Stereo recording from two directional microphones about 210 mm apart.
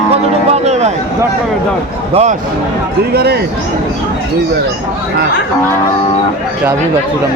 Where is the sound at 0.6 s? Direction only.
30° right (ahead or behind).